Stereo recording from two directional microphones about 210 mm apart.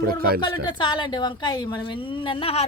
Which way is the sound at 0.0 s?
45° right (ahead or behind).